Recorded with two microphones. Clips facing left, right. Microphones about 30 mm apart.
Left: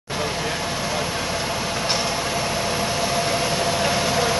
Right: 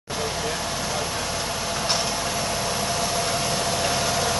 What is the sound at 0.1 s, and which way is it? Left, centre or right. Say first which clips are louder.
Vehicle: left 2 dB; centre.